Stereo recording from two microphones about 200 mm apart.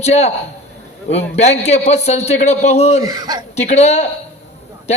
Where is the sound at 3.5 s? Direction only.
35° left (ahead or behind).